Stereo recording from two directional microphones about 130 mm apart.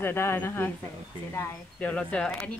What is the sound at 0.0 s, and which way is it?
A woman's voice, 20° left (ahead or behind).